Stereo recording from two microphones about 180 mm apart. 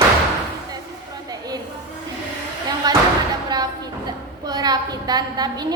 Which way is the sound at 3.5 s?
25° right (ahead or behind).